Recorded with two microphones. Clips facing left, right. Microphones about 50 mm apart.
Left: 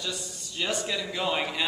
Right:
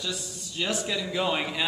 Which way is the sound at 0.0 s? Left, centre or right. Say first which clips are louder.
Right 1 dB; centre.